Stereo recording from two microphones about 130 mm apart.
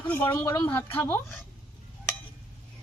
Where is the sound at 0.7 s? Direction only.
15° left (ahead or behind).